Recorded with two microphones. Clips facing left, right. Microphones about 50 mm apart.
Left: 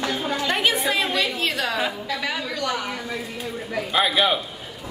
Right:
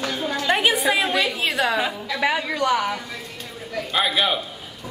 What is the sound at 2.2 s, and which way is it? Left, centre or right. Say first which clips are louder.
Speech: right 7 dB; right.